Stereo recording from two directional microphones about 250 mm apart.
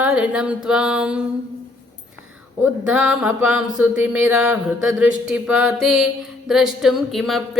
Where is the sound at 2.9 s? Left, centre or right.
Centre.